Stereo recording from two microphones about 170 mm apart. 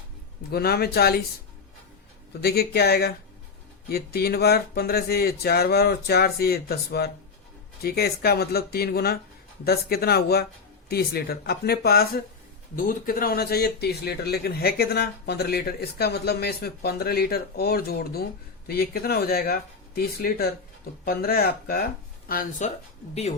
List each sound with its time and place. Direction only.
0.5 s speech: 65° left (ahead or behind)
2.4 s speech: 70° left (ahead or behind)
22.3 s speech: 50° left (ahead or behind)